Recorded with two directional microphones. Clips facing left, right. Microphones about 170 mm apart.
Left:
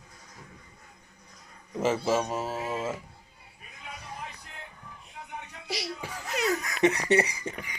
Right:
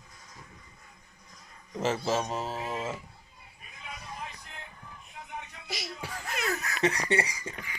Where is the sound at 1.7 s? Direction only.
10° left (ahead or behind).